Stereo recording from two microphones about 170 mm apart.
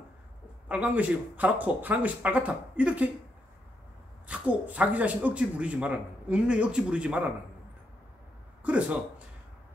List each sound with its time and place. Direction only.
0.7 s speech: 10° right (ahead or behind)
4.3 s speech: 10° right (ahead or behind)